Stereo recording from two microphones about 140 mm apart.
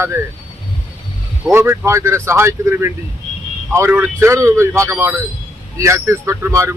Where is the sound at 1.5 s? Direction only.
20° right (ahead or behind).